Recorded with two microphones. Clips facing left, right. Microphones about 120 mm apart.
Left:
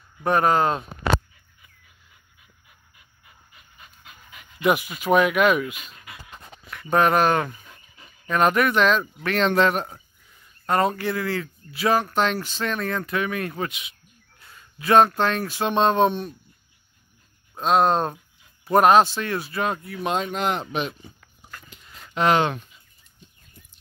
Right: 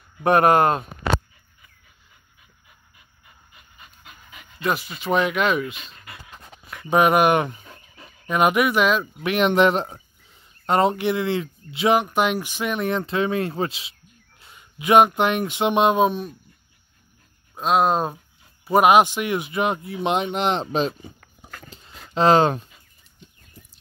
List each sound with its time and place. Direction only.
0.2 s speech: 60° right (ahead or behind)
3.7 s dog: centre (ahead or behind)
4.6 s speech: 15° left (ahead or behind)
6.7 s speech: 10° right (ahead or behind)
7.6 s a sound: 35° right (ahead or behind)
8.3 s speech: 10° right (ahead or behind); by 13.9 s 30° right (ahead or behind)
14.4 s speech: 20° right (ahead or behind); by 16.3 s centre (ahead or behind)
17.6 s speech: 5° right (ahead or behind); by 20.9 s 30° right (ahead or behind)
21.5 s dog: 35° right (ahead or behind)